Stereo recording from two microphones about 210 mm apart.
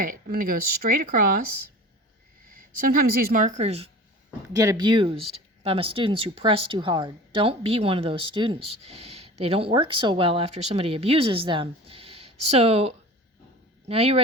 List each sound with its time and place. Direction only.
0.0 s speech: 40° right (ahead or behind)
2.5 s speech: 40° right (ahead or behind)
4.5 s speech: 15° right (ahead or behind)